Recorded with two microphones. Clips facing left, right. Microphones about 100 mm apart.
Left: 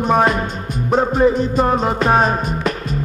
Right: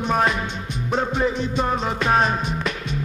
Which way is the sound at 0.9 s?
40° left (ahead or behind).